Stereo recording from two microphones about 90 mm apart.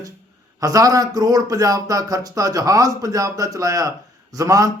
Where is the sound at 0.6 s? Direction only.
40° right (ahead or behind).